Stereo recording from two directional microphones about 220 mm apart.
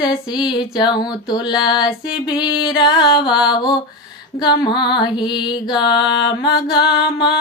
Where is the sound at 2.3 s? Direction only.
20° left (ahead or behind).